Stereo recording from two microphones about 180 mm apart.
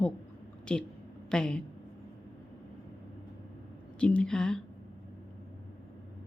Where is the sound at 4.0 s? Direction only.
5° left (ahead or behind).